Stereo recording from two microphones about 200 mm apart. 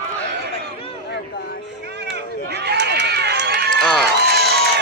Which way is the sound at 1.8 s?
55° right (ahead or behind).